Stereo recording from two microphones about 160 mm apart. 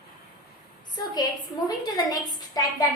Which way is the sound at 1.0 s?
25° left (ahead or behind).